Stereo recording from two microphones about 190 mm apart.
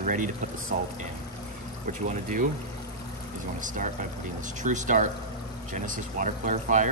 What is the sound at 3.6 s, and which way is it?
Speech, 40° right (ahead or behind).